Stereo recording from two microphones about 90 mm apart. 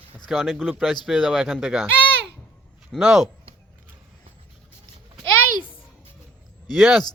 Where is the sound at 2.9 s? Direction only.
5° right (ahead or behind).